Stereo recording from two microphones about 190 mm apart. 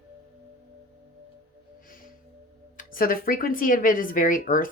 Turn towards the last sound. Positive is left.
turn(degrees=45)  # may be behind; listen again after turning